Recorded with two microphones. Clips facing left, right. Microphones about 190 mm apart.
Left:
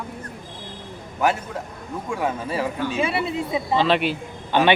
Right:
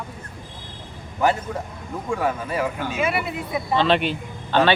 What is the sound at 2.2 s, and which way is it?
Speech, 30° left (ahead or behind).